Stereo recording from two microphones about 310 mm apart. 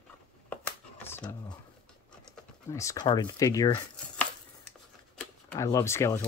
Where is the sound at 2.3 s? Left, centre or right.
Centre.